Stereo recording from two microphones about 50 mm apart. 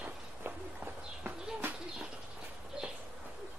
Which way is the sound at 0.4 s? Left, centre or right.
Right.